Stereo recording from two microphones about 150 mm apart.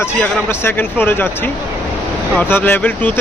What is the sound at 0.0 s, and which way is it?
Speech, 15° left (ahead or behind).